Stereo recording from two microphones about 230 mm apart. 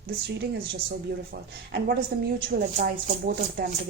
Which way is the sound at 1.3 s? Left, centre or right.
Right.